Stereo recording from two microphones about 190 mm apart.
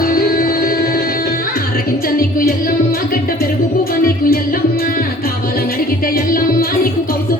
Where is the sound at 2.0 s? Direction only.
50° left (ahead or behind).